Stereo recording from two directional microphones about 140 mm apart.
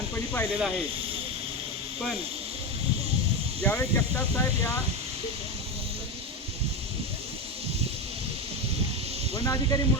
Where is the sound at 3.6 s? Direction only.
20° left (ahead or behind).